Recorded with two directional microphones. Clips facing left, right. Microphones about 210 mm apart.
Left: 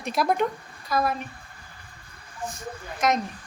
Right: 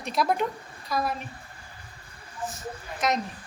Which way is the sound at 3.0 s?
Centre (ahead or behind).